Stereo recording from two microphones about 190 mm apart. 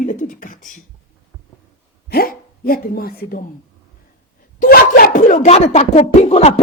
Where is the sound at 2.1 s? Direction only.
50° left (ahead or behind).